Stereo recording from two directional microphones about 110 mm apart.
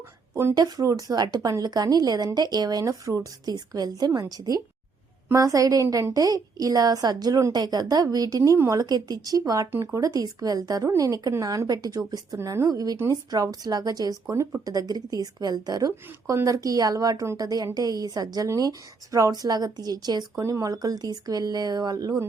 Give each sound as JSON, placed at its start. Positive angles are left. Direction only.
{"t": 0.5, "sound": "a woman's voice", "side_deg": -35}